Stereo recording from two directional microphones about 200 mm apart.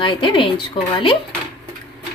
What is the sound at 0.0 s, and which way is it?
Speech, 25° left (ahead or behind).